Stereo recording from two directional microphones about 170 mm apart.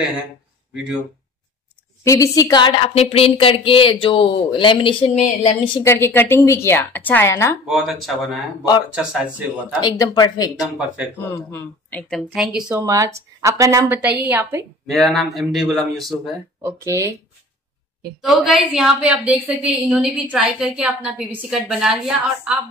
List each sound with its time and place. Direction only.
2.0 s a woman's voice: 20° left (ahead or behind); by 5.7 s 40° left (ahead or behind)
5.8 s a woman's voice: 15° left (ahead or behind)
7.6 s a woman's voice: centre (ahead or behind)
9.8 s speech: 25° left (ahead or behind)
11.1 s a woman's voice: 10° left (ahead or behind)
12.2 s a woman's voice: centre (ahead or behind)
12.8 s a woman's voice: 20° right (ahead or behind); by 16.2 s centre (ahead or behind)
16.6 s a woman's voice: 15° right (ahead or behind)
18.2 s a woman's voice: centre (ahead or behind)